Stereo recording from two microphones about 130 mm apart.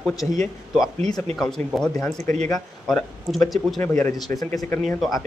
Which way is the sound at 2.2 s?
65° right (ahead or behind).